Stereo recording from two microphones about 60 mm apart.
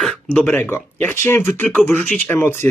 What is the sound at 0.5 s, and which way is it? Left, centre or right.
Speech, left.